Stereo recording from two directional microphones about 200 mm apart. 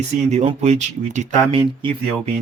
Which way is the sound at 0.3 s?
35° right (ahead or behind).